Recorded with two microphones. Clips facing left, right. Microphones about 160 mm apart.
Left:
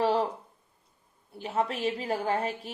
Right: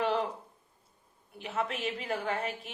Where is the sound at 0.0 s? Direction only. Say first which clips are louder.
Left 4 dB; 35° left (ahead or behind).